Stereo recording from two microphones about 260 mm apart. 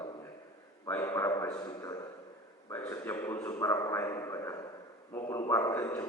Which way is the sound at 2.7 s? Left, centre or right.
Centre.